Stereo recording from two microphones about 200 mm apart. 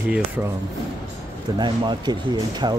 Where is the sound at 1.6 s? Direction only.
20° right (ahead or behind).